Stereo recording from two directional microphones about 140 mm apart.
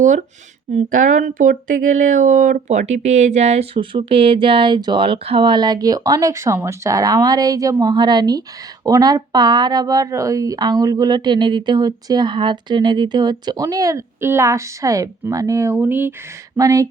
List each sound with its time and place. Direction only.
0.0 s speech: 65° right (ahead or behind); by 16.9 s 25° right (ahead or behind)